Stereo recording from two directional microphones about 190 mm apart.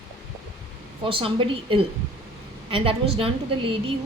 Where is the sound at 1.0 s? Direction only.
30° right (ahead or behind).